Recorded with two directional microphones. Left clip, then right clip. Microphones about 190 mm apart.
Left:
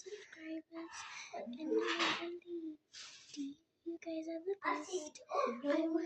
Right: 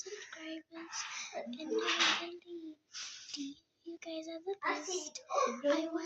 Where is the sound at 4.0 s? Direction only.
15° left (ahead or behind).